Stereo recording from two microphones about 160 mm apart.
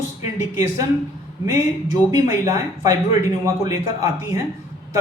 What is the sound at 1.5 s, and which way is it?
Speech, 20° right (ahead or behind).